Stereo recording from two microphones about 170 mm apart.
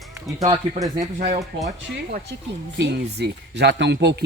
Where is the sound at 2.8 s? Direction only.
90° right.